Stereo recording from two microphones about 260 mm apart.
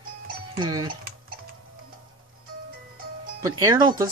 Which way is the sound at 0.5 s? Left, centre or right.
Centre.